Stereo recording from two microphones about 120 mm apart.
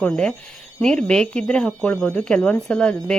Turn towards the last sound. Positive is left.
turn(degrees=5)  # may be behind; listen again after turning